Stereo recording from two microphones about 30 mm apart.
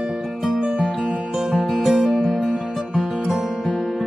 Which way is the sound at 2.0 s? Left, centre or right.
Centre.